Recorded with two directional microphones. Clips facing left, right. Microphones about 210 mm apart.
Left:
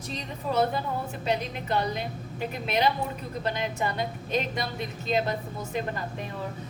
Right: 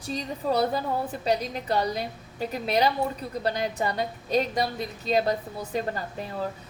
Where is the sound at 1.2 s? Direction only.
35° right (ahead or behind).